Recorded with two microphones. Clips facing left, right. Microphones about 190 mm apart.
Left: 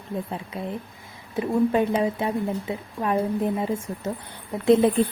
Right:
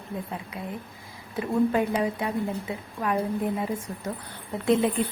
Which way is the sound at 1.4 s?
25° left (ahead or behind).